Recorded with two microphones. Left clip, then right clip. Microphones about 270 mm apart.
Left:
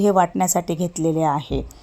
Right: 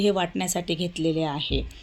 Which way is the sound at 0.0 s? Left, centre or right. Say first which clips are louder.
Left 7 dB; left.